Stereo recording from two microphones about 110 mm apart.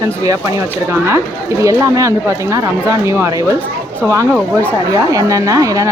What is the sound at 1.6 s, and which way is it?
Speech, 30° right (ahead or behind).